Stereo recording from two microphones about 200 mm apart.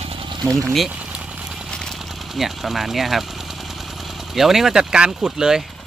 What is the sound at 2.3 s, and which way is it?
Speech, centre (ahead or behind).